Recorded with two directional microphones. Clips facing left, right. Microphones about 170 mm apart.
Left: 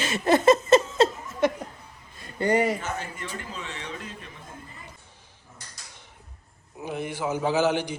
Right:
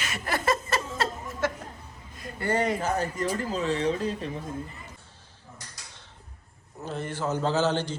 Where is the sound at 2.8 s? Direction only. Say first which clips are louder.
Right 6 dB; 40° right (ahead or behind).